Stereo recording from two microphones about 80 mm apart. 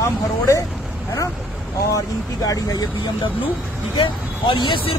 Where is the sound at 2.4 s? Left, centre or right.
Left.